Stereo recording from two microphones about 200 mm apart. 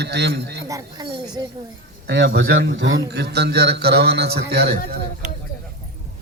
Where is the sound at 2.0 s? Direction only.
55° right (ahead or behind).